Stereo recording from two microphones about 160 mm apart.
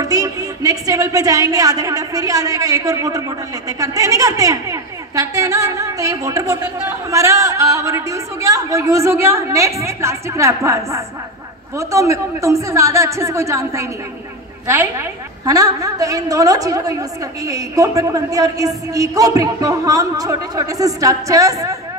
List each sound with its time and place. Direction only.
0.0 s speech: 20° right (ahead or behind)